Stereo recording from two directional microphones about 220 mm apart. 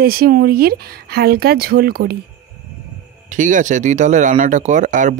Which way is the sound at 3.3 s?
35° right (ahead or behind).